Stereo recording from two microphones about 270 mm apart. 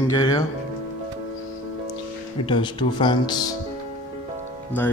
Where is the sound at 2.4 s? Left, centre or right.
Centre.